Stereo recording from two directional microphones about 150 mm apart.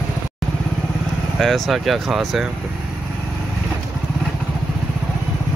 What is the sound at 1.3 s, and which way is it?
Speech, centre (ahead or behind).